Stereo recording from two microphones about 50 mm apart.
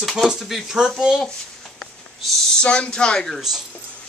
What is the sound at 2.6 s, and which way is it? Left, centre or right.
Speech, left.